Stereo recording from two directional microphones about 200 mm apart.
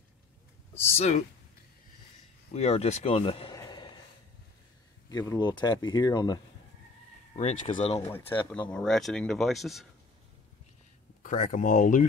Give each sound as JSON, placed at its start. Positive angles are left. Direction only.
{"t": 0.9, "sound": "speech", "side_deg": 30}
{"t": 2.5, "sound": "speech", "side_deg": 30}
{"t": 5.1, "sound": "speech", "side_deg": 15}
{"t": 7.3, "sound": "speech", "side_deg": 35}
{"t": 8.3, "sound": "speech", "side_deg": 10}
{"t": 11.2, "sound": "speech", "side_deg": 40}